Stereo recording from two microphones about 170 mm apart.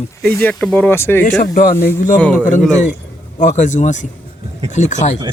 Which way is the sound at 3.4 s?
45° left (ahead or behind).